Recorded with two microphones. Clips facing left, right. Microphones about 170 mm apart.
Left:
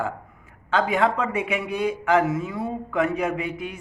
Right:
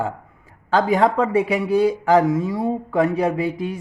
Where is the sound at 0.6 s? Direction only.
40° right (ahead or behind).